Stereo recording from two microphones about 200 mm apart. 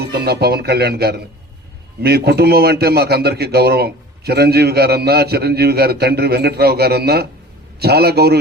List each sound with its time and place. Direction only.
0.0 s a man's voice: 55° right (ahead or behind)